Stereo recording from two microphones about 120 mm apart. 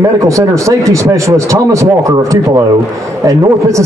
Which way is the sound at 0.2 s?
25° right (ahead or behind).